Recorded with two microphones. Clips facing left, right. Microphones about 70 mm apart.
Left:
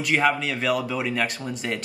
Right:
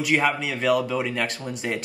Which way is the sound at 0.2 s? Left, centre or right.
Centre.